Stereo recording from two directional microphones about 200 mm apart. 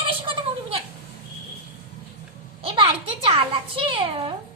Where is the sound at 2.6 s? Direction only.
25° right (ahead or behind).